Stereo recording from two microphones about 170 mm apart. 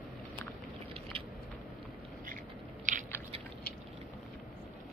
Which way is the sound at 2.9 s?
50° right (ahead or behind).